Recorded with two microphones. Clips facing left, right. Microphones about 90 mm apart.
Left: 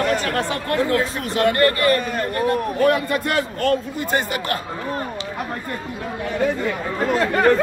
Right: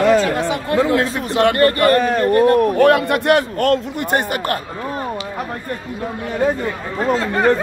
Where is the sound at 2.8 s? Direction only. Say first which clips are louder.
Right 5 dB; 70° right (ahead or behind).